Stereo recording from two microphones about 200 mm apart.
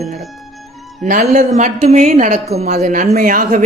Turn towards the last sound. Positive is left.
turn(degrees=-45)  # may be behind; listen again after turning